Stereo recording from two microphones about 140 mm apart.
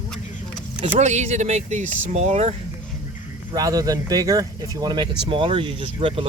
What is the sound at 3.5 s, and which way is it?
Speech, 25° right (ahead or behind).